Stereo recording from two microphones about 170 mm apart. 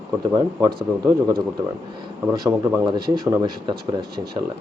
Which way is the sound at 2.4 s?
20° right (ahead or behind).